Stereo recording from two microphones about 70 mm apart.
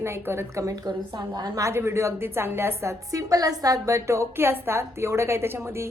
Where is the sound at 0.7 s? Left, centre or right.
Right.